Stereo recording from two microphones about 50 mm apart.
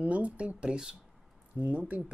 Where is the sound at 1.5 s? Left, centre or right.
Right.